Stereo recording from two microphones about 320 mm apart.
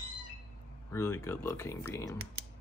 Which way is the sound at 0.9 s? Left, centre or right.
Centre.